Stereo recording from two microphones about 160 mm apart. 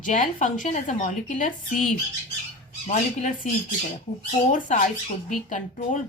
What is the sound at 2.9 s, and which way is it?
Speech, 45° left (ahead or behind).